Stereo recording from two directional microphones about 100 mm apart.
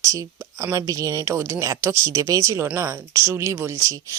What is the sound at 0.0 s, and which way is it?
Speech, 30° right (ahead or behind).